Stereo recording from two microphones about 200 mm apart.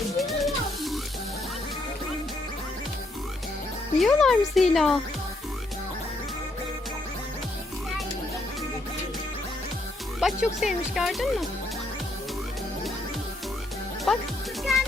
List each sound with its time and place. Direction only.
0.2 s music: centre (ahead or behind)
4.0 s speech: centre (ahead or behind)
10.2 s speech: centre (ahead or behind)
14.1 s speech: centre (ahead or behind)
14.6 s music: centre (ahead or behind)